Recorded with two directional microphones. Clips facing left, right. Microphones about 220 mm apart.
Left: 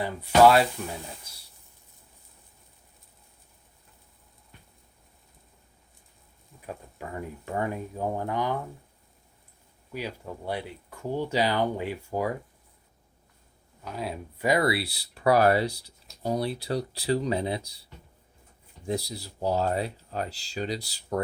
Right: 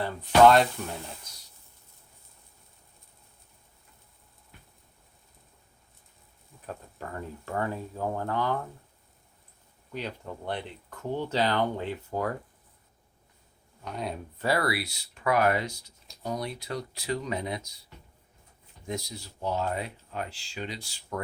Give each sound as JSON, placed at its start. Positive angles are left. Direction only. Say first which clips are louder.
{"t": 0.0, "sound": "speech", "louder": "even", "side_deg": 10}
{"t": 6.7, "sound": "speech", "louder": "left 1 dB", "side_deg": 10}
{"t": 9.9, "sound": "speech", "louder": "left 1 dB", "side_deg": 10}
{"t": 13.8, "sound": "speech", "louder": "left 1 dB", "side_deg": 5}
{"t": 14.4, "sound": "speech", "louder": "left 3 dB", "side_deg": 20}
{"t": 18.9, "sound": "speech", "louder": "left 5 dB", "side_deg": 35}